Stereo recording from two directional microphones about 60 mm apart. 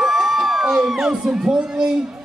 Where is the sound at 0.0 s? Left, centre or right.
Centre.